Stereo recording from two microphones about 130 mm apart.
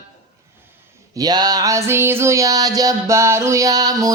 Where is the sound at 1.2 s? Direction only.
30° right (ahead or behind).